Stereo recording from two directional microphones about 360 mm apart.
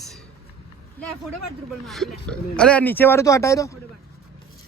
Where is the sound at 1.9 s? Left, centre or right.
Centre.